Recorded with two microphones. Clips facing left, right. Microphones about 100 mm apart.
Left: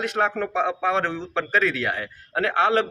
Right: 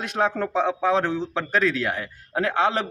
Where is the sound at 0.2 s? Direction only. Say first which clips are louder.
Right 2 dB; 5° right (ahead or behind).